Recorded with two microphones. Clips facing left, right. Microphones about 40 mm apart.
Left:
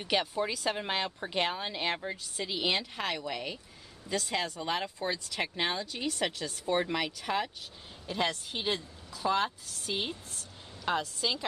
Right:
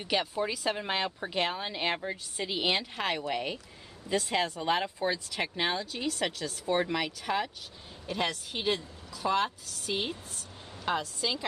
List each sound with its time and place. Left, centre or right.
0.0 s speech: centre
9.2 s speech: centre